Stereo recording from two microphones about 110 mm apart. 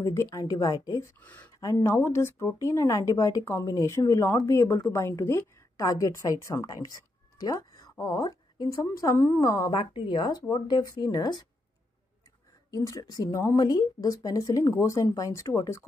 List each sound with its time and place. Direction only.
0.0 s speech: 25° left (ahead or behind)
1.2 s speech: 15° left (ahead or behind)
1.6 s speech: 30° left (ahead or behind)
7.3 s a sound: 35° left (ahead or behind)
8.0 s speech: 35° left (ahead or behind)
9.7 s a woman's voice: 50° left (ahead or behind)
12.7 s speech: 35° left (ahead or behind)